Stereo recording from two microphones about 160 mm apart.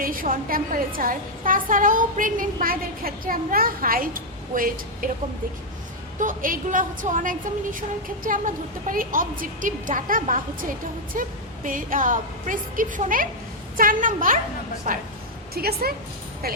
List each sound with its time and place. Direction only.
0.0 s a woman's voice: 60° right (ahead or behind)
6.1 s a woman's voice: 55° right (ahead or behind)
15.5 s a woman's voice: 75° right (ahead or behind)